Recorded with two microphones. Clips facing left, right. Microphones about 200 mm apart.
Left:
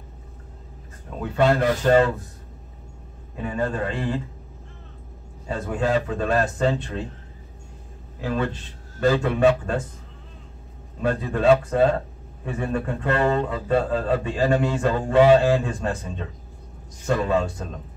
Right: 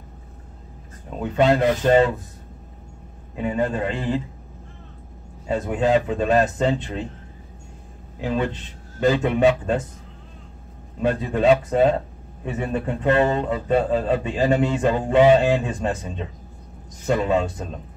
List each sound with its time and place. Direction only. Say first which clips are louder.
1.2 s a man's voice: right 2 dB; 20° right (ahead or behind)
3.4 s a man's voice: right 3 dB; 20° right (ahead or behind)
5.5 s a man's voice: right 4 dB; 20° right (ahead or behind)
8.2 s a man's voice: right 2 dB; 20° right (ahead or behind)
11.0 s a man's voice: right 2 dB; 20° right (ahead or behind)
17.0 s a man's voice: right 2 dB; 20° right (ahead or behind)